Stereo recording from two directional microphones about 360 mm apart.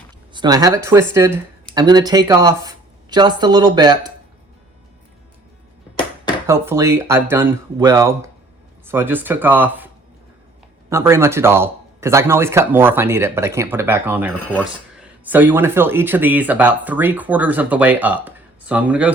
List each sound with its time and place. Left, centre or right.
0.3 s speech: centre
6.5 s speech: centre